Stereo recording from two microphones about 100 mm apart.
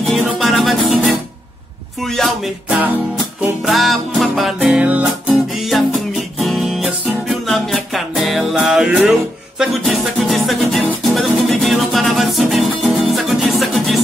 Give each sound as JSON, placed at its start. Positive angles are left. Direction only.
{"t": 0.1, "sound": "music", "side_deg": 0}
{"t": 2.0, "sound": "speech", "side_deg": 5}
{"t": 2.7, "sound": "music", "side_deg": -15}
{"t": 3.6, "sound": "music", "side_deg": 0}
{"t": 5.5, "sound": "music", "side_deg": 0}